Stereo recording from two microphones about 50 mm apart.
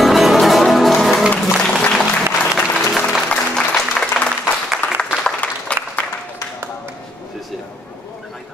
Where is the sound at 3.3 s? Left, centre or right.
Left.